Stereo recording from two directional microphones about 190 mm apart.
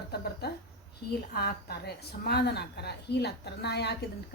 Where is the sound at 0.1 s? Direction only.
55° left (ahead or behind).